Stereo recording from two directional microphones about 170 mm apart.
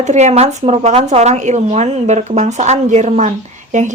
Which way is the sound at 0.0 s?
40° right (ahead or behind).